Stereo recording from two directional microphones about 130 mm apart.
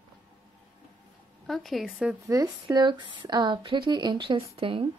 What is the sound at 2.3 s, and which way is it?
A woman's voice, 30° right (ahead or behind).